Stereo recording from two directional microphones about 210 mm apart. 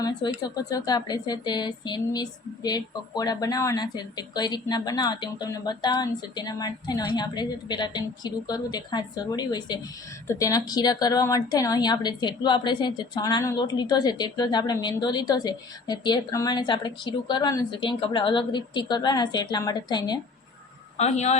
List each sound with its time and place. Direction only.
0.2 s speech: 20° left (ahead or behind)
21.0 s a man's voice: 30° left (ahead or behind)